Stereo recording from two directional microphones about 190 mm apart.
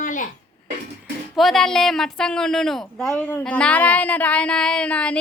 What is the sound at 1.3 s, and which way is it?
A woman's voice, centre (ahead or behind).